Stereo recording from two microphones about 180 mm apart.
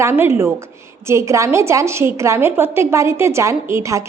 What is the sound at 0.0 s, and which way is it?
A woman's voice, 15° right (ahead or behind).